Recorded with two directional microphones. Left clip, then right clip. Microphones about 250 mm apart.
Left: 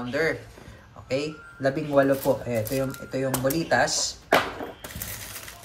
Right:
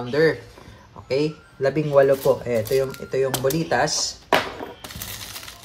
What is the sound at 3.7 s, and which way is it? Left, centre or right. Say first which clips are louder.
Speech: right 1 dB; right.